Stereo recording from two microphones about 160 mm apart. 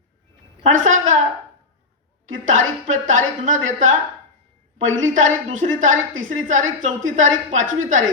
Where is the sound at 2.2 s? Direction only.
55° right (ahead or behind).